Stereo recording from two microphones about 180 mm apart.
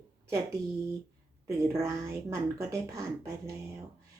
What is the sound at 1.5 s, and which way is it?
Speech, 15° right (ahead or behind).